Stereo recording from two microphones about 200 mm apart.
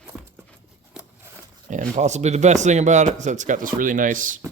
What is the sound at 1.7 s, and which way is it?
Speech, 40° right (ahead or behind).